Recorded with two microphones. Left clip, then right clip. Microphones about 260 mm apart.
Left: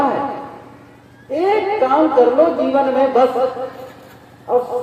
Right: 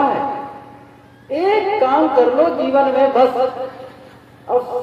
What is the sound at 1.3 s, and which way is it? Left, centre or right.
A man's voice, right.